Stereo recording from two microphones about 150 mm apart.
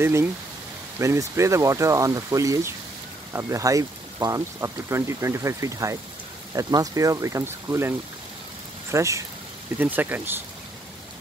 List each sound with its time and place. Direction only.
0.0 s speech: 15° right (ahead or behind)
8.9 s speech: 20° right (ahead or behind)